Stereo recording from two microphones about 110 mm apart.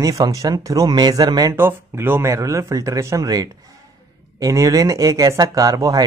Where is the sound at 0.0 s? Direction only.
35° right (ahead or behind).